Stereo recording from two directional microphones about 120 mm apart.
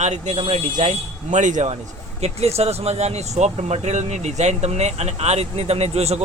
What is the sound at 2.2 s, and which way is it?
Speech, 60° right (ahead or behind).